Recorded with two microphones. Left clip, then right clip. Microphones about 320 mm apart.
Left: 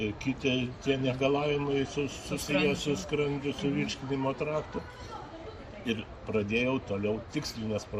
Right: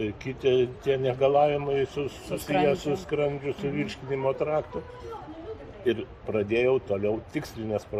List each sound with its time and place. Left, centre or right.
0.0 s speech: centre
5.8 s speech: centre